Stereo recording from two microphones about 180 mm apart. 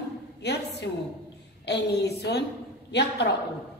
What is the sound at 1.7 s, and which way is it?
A woman's voice, 70° left (ahead or behind).